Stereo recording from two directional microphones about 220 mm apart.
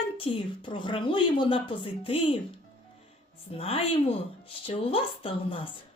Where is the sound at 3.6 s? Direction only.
25° left (ahead or behind).